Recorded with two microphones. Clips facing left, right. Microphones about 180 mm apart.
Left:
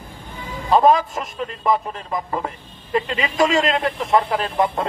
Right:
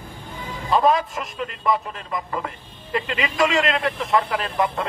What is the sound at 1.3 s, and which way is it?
A man's voice, 30° left (ahead or behind).